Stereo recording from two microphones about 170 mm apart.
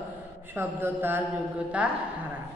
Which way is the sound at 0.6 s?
15° right (ahead or behind).